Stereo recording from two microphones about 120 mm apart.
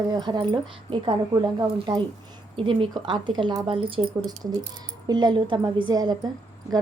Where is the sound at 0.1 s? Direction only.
40° right (ahead or behind).